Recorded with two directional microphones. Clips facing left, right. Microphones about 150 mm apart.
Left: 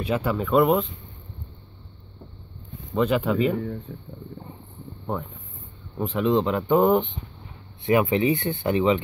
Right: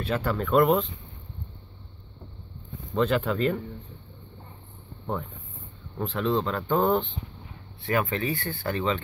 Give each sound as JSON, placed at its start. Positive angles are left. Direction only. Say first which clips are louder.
{"t": 0.0, "sound": "speech", "louder": "left 3 dB", "side_deg": 10}
{"t": 2.9, "sound": "speech", "louder": "left 2 dB", "side_deg": 10}
{"t": 3.9, "sound": "speech", "louder": "left 9 dB", "side_deg": 60}
{"t": 5.1, "sound": "speech", "louder": "left 2 dB", "side_deg": 5}